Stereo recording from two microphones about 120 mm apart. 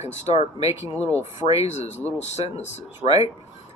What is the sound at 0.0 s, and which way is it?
Speech, 65° left (ahead or behind).